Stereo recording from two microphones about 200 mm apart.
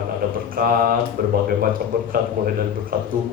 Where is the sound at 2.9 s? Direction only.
45° right (ahead or behind).